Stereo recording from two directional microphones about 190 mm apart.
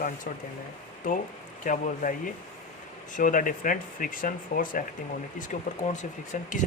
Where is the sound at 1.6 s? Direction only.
45° left (ahead or behind).